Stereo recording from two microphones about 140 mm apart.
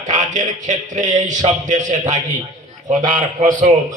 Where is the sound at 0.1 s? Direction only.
60° right (ahead or behind).